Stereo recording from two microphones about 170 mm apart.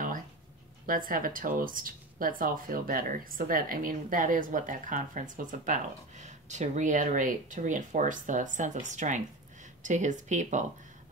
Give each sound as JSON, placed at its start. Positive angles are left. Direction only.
{"t": 0.8, "sound": "speech", "side_deg": -55}